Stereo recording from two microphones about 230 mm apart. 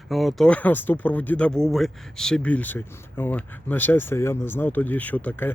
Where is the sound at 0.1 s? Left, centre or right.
Centre.